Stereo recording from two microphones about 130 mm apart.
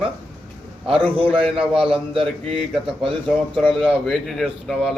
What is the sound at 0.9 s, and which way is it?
Speech, 45° right (ahead or behind).